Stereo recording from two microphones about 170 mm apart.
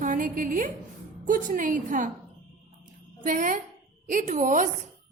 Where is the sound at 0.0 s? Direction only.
50° right (ahead or behind).